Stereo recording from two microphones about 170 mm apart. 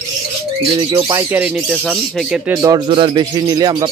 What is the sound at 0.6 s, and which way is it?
Speech, 30° right (ahead or behind).